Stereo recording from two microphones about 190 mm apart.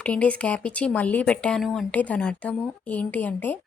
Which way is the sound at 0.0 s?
5° left (ahead or behind).